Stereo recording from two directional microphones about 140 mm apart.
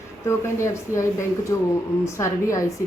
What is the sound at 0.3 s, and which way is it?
A woman's voice, 20° left (ahead or behind).